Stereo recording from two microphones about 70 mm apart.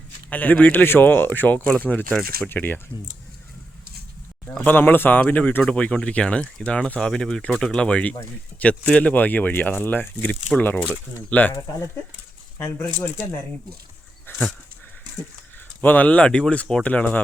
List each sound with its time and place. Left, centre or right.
0.3 s speech: left
4.5 s speech: left
12.5 s speech: left
14.3 s dog: left
15.8 s speech: left